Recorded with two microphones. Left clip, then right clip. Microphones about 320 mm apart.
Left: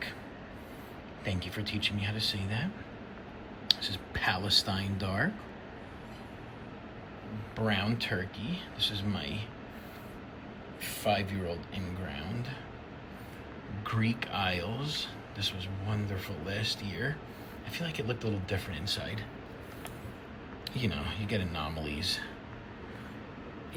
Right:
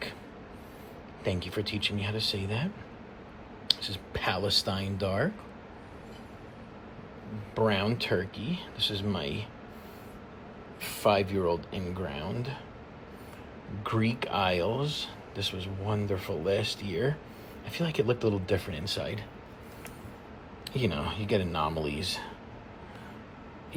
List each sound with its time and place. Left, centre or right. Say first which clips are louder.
1.2 s speech: right 5 dB; centre
3.7 s speech: even; centre
7.7 s speech: right 3 dB; centre
10.8 s speech: right 5 dB; centre
13.8 s speech: right 4 dB; centre
20.7 s speech: right 5 dB; centre